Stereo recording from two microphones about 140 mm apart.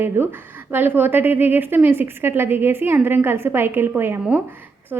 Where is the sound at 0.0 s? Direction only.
15° right (ahead or behind).